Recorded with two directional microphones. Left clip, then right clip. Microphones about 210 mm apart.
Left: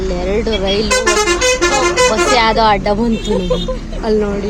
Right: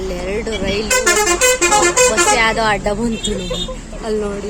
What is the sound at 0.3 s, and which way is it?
Speech, 5° right (ahead or behind).